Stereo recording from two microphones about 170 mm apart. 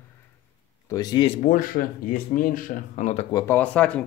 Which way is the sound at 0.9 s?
25° left (ahead or behind).